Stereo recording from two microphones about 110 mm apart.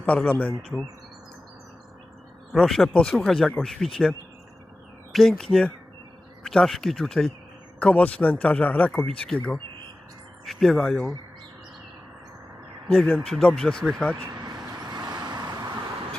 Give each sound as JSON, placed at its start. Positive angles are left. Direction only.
{"t": 0.0, "sound": "speech", "side_deg": 10}
{"t": 0.7, "sound": "speech", "side_deg": -5}
{"t": 2.5, "sound": "speech", "side_deg": 0}
{"t": 5.1, "sound": "speech", "side_deg": 0}
{"t": 12.9, "sound": "speech", "side_deg": 5}
{"t": 14.3, "sound": "vehicle", "side_deg": -40}